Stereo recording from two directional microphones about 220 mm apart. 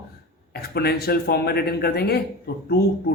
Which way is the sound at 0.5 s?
45° left (ahead or behind).